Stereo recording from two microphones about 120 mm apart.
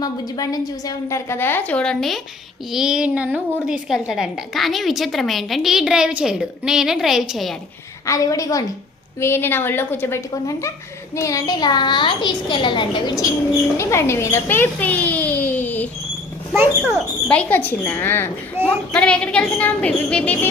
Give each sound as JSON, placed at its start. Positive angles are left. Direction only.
{"t": 0.0, "sound": "a woman's voice", "side_deg": 30}
{"t": 8.0, "sound": "a woman's voice", "side_deg": 25}
{"t": 13.7, "sound": "a child's voice", "side_deg": 20}
{"t": 17.2, "sound": "a woman's voice", "side_deg": 10}